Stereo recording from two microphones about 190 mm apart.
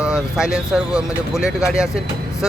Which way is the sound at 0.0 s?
5° right (ahead or behind).